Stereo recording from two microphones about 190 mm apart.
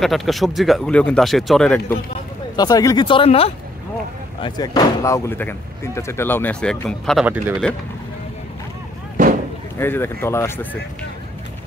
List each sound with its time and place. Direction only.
0.0 s a man's voice: centre (ahead or behind)
2.5 s speech: 20° left (ahead or behind); by 7.2 s 5° left (ahead or behind)
7.2 s speech: 10° right (ahead or behind)
9.8 s speech: 10° left (ahead or behind)